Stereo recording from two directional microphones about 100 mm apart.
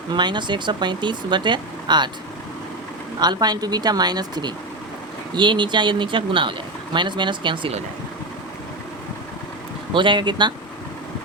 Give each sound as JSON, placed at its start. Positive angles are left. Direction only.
{"t": 0.1, "sound": "speech", "side_deg": -50}
{"t": 3.2, "sound": "speech", "side_deg": -45}
{"t": 9.9, "sound": "speech", "side_deg": -55}